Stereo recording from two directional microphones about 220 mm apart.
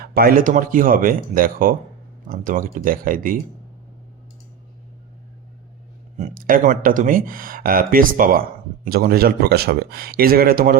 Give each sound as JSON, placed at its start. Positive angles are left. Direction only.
{"t": 0.0, "sound": "speech", "side_deg": -45}
{"t": 6.1, "sound": "speech", "side_deg": -35}